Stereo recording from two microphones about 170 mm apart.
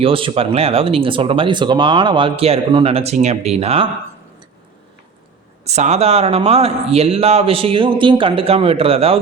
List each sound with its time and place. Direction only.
0.0 s speech: 30° right (ahead or behind)
5.6 s speech: 40° right (ahead or behind)